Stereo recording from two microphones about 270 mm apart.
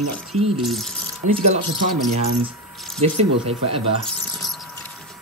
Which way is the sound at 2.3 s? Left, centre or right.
Centre.